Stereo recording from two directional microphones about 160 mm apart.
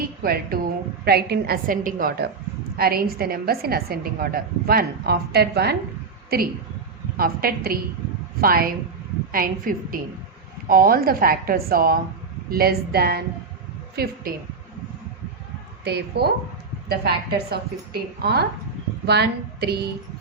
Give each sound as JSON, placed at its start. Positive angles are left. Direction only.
{"t": 0.2, "sound": "a woman's voice", "side_deg": -70}
{"t": 1.0, "sound": "a woman's voice", "side_deg": -80}
{"t": 7.2, "sound": "a woman's voice", "side_deg": -70}
{"t": 15.8, "sound": "a woman's voice", "side_deg": -90}